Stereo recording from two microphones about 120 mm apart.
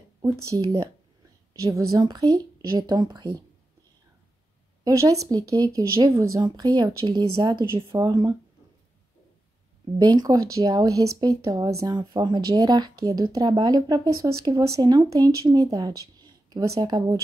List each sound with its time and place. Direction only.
0.2 s speech: 30° right (ahead or behind)
4.8 s speech: 30° right (ahead or behind)
9.9 s speech: 35° right (ahead or behind)